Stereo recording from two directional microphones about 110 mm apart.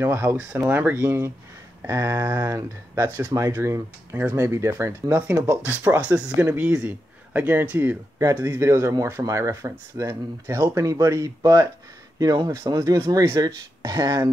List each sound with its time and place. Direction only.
0.0 s speech: 20° right (ahead or behind)
5.7 s speech: 15° right (ahead or behind)
8.2 s speech: 30° right (ahead or behind)